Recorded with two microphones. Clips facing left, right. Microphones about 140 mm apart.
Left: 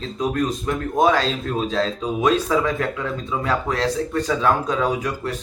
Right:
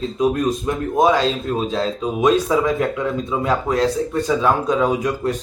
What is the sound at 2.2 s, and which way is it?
A man's voice, 15° right (ahead or behind).